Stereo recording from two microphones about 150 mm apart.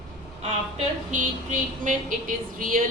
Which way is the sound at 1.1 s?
60° right (ahead or behind).